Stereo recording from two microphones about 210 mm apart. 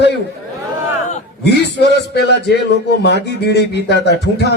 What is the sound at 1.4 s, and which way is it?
Speech, 50° left (ahead or behind).